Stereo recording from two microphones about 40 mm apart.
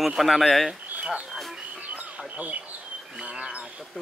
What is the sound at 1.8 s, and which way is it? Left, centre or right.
Bird, right.